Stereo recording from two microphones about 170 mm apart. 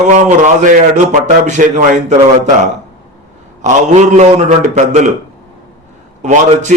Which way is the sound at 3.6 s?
45° right (ahead or behind).